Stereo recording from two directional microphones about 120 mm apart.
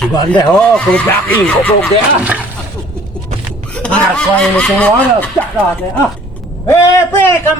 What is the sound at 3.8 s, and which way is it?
Speech, 10° left (ahead or behind).